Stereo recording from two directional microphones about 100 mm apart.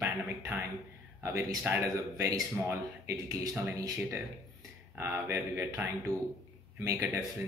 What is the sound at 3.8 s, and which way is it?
Speech, 35° right (ahead or behind).